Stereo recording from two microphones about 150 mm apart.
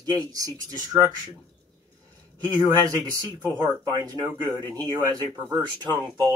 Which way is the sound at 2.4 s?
25° right (ahead or behind).